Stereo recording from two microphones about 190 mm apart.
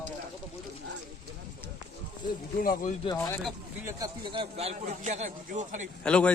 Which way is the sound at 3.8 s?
15° right (ahead or behind).